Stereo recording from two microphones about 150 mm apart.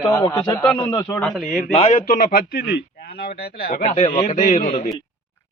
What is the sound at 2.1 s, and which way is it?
Speech, 70° left (ahead or behind).